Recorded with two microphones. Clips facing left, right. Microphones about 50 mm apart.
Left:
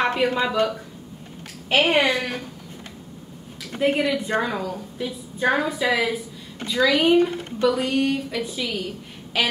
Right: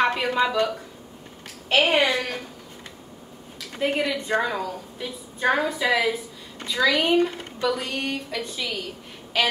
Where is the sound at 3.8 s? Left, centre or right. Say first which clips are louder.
Left 3 dB; centre.